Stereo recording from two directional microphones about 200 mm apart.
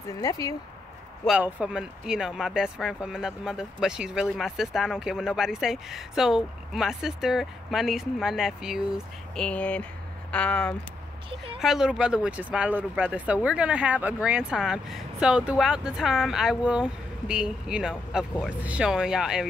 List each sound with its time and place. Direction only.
0.2 s speech: 20° left (ahead or behind)
1.2 s speech: 5° right (ahead or behind)